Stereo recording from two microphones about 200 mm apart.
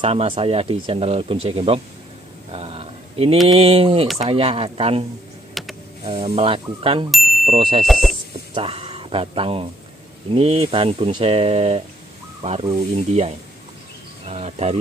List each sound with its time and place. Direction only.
0.0 s speech: 30° right (ahead or behind)
2.5 s a sound: 30° right (ahead or behind)
3.5 s speech: 30° right (ahead or behind)
5.5 s computer keyboard: centre (ahead or behind)
6.0 s speech: 30° right (ahead or behind)
7.1 s bicycle bell: centre (ahead or behind)
7.4 s speech: 25° right (ahead or behind)
7.8 s speech: centre (ahead or behind)
8.5 s speech: 30° right (ahead or behind)